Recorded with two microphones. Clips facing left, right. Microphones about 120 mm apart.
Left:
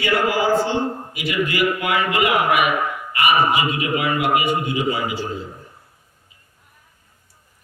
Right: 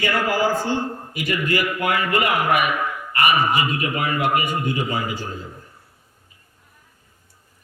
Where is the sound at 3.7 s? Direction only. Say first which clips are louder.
Left 2 dB; 45° right (ahead or behind).